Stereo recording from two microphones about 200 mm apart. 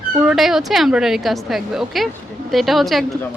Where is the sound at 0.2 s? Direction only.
5° right (ahead or behind).